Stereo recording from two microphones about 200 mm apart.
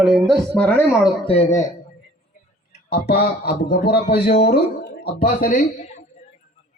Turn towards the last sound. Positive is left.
turn(degrees=40)  # may be behind; listen again after turning